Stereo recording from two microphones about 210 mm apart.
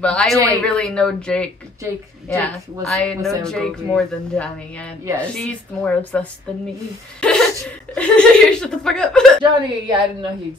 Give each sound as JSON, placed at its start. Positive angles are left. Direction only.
{"t": 0.0, "sound": "speech", "side_deg": 5}
{"t": 9.4, "sound": "a woman's voice", "side_deg": -25}